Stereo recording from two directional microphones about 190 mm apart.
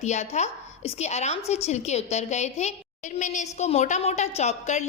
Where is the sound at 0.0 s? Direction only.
35° left (ahead or behind).